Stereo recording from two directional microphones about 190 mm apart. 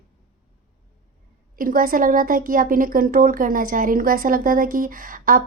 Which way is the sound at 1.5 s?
50° right (ahead or behind).